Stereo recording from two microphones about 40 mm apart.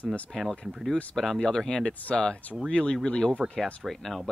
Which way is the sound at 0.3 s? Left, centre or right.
Centre.